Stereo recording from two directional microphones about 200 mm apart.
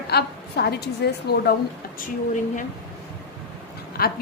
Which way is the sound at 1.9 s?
40° left (ahead or behind).